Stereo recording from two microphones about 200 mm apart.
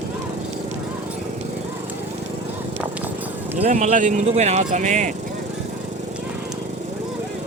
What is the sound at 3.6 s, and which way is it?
Vehicle, 35° right (ahead or behind).